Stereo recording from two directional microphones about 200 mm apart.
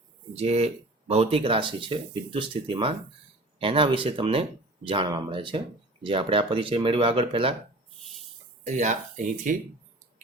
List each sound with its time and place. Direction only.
0.3 s speech: 30° right (ahead or behind)
8.6 s speech: 35° right (ahead or behind)